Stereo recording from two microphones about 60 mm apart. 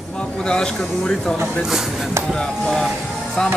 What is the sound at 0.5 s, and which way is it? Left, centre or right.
Speech, centre.